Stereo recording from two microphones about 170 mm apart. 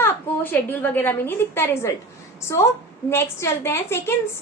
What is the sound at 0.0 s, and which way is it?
A woman's voice, 10° left (ahead or behind).